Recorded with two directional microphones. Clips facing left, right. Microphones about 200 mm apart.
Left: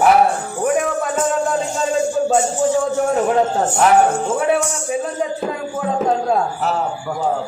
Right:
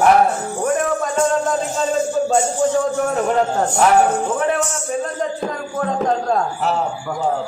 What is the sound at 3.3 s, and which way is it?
A man's voice, 5° left (ahead or behind).